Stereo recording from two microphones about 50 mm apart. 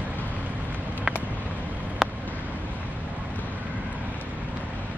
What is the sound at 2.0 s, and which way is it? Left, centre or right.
Vehicle, centre.